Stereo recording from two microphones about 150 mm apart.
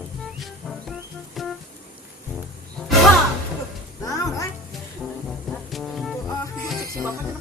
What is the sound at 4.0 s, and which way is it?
Music, 20° left (ahead or behind).